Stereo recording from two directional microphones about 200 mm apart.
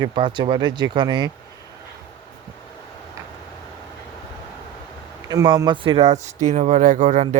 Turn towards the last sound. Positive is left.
turn(degrees=-35)  # may be behind; listen again after turning